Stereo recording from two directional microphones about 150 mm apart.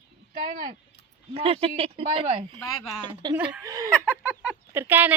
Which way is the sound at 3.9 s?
15° left (ahead or behind).